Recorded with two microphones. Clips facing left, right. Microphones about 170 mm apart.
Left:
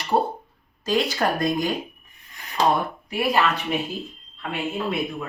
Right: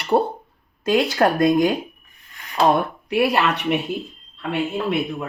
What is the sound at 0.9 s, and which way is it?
Speech, 55° right (ahead or behind).